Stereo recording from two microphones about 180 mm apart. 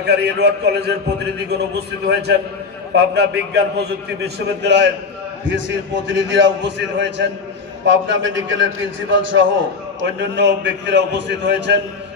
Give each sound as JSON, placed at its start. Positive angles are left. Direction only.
{"t": 0.0, "sound": "a man's voice", "side_deg": -65}
{"t": 5.5, "sound": "a man's voice", "side_deg": -85}
{"t": 9.9, "sound": "a man's voice", "side_deg": -75}